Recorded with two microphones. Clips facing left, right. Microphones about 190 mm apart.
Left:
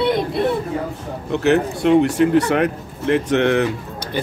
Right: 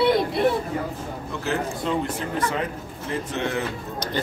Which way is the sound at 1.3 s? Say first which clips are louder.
Left 11 dB; 70° left (ahead or behind).